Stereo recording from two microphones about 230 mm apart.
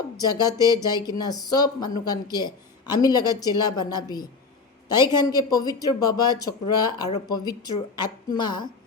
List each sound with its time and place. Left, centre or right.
0.2 s a woman's voice: centre